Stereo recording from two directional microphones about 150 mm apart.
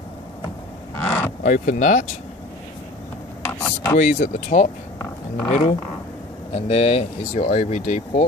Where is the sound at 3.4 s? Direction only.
20° left (ahead or behind).